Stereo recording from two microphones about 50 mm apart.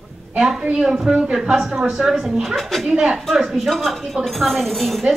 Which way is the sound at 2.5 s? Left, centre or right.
Centre.